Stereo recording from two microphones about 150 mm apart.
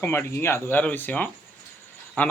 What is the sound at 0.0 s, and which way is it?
Speech, 15° left (ahead or behind).